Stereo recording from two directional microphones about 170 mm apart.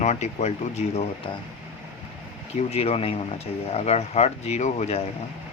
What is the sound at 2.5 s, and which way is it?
Speech, 35° left (ahead or behind).